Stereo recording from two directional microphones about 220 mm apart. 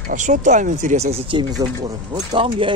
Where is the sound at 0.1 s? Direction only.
35° right (ahead or behind).